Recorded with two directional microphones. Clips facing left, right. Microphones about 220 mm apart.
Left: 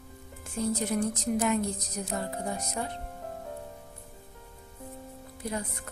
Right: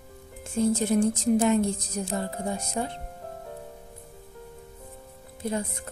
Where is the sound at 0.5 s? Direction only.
25° right (ahead or behind).